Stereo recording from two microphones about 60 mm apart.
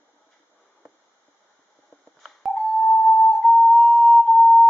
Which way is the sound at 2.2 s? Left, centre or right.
Centre.